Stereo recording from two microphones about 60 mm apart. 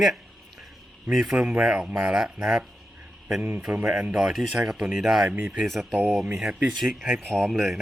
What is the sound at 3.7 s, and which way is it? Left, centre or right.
Speech, centre.